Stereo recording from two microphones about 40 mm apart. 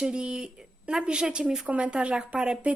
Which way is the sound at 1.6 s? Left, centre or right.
Right.